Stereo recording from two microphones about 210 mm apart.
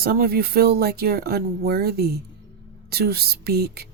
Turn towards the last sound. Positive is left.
turn(degrees=-45)  # may be behind; listen again after turning